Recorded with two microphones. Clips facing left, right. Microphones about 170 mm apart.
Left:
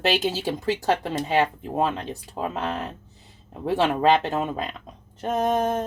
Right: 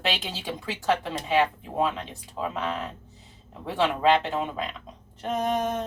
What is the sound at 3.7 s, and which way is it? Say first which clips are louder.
Speech: left 2 dB; 45° left (ahead or behind).